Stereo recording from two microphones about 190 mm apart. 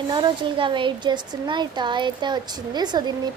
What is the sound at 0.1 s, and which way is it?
A child's voice, 25° right (ahead or behind).